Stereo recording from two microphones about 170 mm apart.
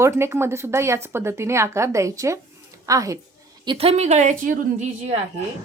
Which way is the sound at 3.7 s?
35° right (ahead or behind).